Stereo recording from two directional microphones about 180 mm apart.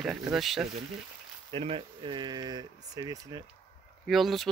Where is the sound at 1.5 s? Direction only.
35° right (ahead or behind).